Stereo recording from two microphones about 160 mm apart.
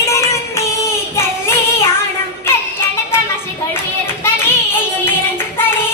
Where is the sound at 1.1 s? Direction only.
15° left (ahead or behind).